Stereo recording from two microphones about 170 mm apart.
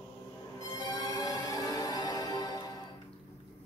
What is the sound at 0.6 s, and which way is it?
Music, 20° left (ahead or behind).